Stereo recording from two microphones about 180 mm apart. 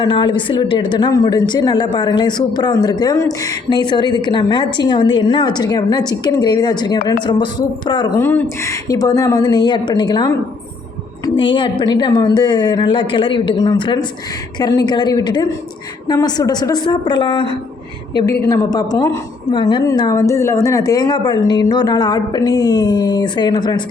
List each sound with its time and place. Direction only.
0.0 s a woman's voice: 25° left (ahead or behind)
11.3 s a woman's voice: 25° left (ahead or behind)